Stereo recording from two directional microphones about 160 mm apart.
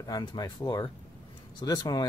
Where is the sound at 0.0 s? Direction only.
25° left (ahead or behind).